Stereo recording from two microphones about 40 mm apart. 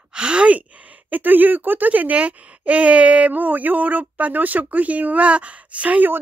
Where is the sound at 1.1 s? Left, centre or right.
Right.